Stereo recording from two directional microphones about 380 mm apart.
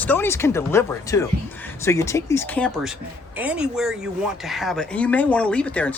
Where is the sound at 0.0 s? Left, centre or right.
Centre.